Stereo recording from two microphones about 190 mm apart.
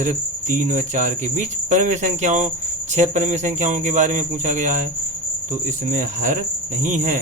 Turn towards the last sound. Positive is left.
turn(degrees=-40)  # may be behind; listen again after turning